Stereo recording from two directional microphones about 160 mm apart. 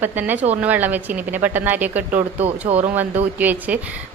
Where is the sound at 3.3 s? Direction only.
10° right (ahead or behind).